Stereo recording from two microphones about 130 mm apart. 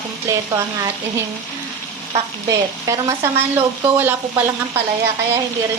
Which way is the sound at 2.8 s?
20° right (ahead or behind).